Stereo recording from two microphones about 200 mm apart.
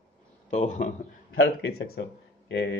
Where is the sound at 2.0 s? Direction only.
60° left (ahead or behind).